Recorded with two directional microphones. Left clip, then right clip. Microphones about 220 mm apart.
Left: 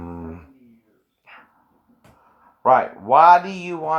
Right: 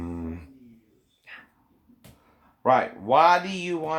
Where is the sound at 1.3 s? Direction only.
20° left (ahead or behind).